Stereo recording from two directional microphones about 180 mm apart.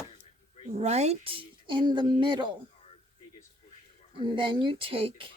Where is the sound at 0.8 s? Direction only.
35° right (ahead or behind).